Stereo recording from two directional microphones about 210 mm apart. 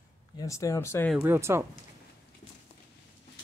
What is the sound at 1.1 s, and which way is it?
Speech, 10° right (ahead or behind).